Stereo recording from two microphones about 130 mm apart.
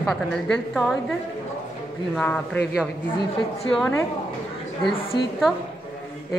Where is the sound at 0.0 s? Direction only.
5° left (ahead or behind).